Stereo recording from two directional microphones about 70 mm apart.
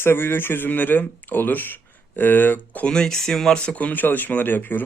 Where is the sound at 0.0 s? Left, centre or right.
Left.